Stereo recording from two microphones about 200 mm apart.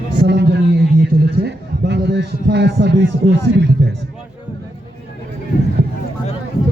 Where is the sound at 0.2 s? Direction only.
55° right (ahead or behind).